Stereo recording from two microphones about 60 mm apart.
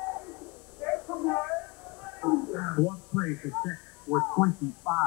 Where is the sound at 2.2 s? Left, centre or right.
Centre.